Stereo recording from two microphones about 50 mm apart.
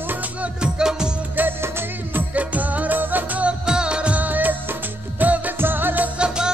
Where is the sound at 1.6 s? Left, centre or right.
Right.